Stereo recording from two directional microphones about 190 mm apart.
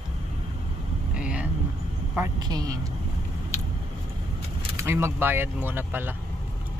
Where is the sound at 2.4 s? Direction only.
20° right (ahead or behind).